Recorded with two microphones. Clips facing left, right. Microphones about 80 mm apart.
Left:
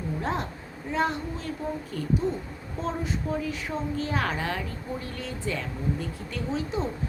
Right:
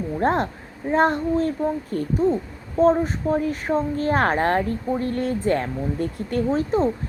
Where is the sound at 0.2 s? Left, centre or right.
Right.